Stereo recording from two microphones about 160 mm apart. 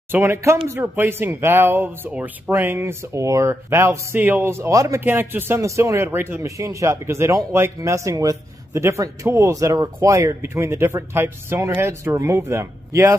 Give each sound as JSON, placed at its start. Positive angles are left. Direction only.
{"t": 0.1, "sound": "speech", "side_deg": -15}